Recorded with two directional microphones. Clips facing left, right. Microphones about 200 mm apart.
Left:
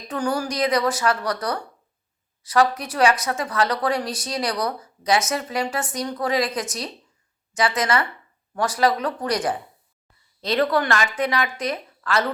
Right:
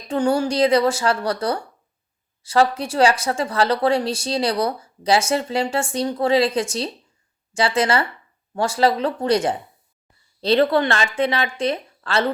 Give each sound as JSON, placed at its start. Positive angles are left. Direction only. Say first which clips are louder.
{"t": 0.1, "sound": "speech", "louder": "right 5 dB", "side_deg": -25}